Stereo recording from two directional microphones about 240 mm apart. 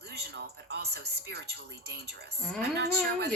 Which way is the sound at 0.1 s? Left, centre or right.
Right.